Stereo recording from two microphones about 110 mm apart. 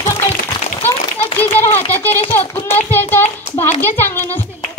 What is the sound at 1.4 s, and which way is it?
Speech, 20° left (ahead or behind).